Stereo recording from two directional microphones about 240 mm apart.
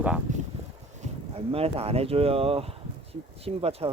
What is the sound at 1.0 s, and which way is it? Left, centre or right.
Speech, right.